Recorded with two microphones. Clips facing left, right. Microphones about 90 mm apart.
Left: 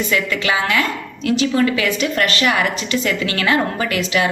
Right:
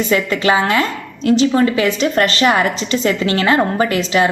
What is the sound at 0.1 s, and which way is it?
A woman's voice, 35° right (ahead or behind).